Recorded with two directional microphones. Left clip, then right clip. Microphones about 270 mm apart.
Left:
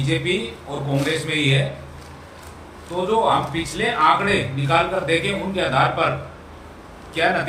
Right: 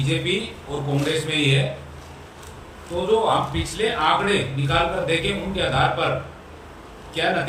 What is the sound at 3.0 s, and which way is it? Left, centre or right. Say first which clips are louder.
A man's voice: left 1 dB; centre.